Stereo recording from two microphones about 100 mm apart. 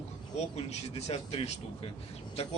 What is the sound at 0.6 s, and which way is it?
Speech, 85° left.